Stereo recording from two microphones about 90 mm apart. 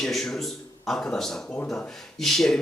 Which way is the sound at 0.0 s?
5° left (ahead or behind).